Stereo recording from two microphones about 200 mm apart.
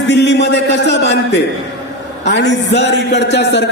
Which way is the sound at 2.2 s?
60° left (ahead or behind).